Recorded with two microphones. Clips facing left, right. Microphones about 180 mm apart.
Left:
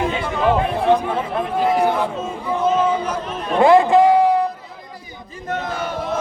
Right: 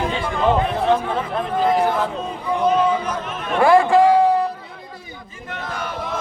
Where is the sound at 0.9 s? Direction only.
10° left (ahead or behind).